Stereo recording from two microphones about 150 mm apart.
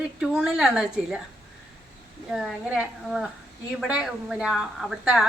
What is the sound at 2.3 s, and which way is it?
A woman's voice, 5° right (ahead or behind).